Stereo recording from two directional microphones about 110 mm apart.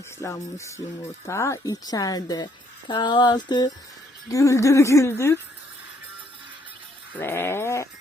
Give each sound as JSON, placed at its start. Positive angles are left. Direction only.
{"t": 0.2, "sound": "a woman's voice", "side_deg": 25}
{"t": 4.3, "sound": "a woman's voice", "side_deg": 30}
{"t": 7.1, "sound": "a woman's voice", "side_deg": 20}